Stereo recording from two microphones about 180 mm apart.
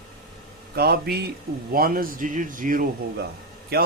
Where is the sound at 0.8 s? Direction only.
60° right (ahead or behind).